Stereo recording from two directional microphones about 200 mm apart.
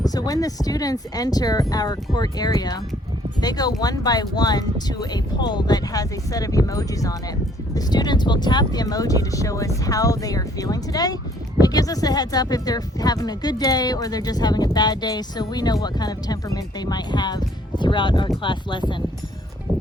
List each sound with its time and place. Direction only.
0.0 s speech: 20° left (ahead or behind)